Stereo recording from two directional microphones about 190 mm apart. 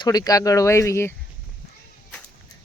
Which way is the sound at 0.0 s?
20° left (ahead or behind).